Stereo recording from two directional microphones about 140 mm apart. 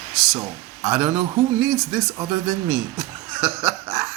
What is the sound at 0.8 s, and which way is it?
Speech, 5° right (ahead or behind).